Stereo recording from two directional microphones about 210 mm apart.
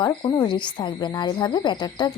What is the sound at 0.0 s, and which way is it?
Speech, 20° left (ahead or behind).